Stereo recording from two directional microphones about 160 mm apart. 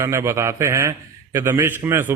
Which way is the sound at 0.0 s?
20° right (ahead or behind).